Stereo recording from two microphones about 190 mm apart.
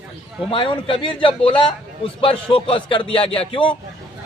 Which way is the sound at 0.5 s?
25° left (ahead or behind).